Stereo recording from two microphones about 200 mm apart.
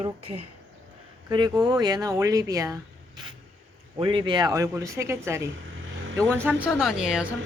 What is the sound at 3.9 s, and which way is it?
Speech, 25° right (ahead or behind).